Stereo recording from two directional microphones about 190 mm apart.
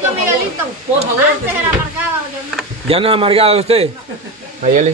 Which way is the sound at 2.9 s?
30° right (ahead or behind).